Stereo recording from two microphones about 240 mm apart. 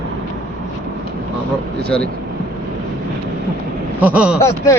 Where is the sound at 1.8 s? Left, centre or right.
Centre.